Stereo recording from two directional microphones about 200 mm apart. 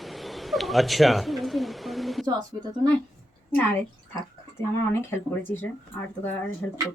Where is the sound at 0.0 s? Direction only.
Centre (ahead or behind).